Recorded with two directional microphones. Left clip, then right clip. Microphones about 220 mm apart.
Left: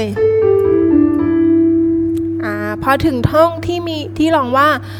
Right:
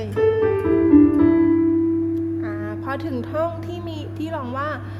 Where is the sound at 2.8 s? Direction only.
35° left (ahead or behind).